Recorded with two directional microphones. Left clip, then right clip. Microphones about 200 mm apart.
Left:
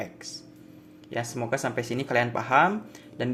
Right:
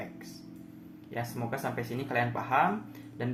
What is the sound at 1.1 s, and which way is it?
Speech, 45° left (ahead or behind).